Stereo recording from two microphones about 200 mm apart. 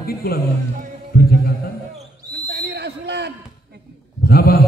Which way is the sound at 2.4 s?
55° right (ahead or behind).